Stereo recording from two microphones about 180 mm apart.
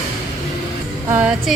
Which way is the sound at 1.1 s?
5° right (ahead or behind).